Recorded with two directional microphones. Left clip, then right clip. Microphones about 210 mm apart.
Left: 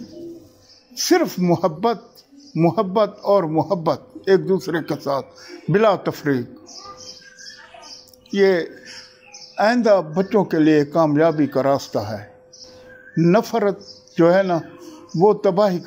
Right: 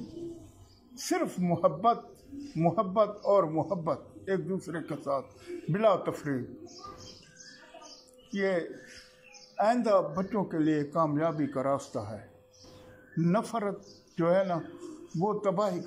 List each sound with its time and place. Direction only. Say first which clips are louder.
0.9 s speech: left 13 dB; 45° left (ahead or behind)
8.3 s speech: left 13 dB; 50° left (ahead or behind)